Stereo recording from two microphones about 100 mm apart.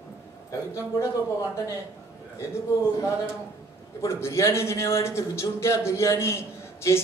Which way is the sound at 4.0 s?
30° left (ahead or behind).